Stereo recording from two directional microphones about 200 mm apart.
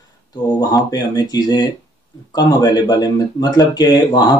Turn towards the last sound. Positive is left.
turn(degrees=20)  # may be behind; listen again after turning